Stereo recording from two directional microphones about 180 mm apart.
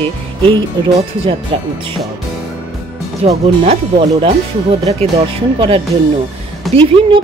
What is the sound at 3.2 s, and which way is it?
Speech, 35° right (ahead or behind).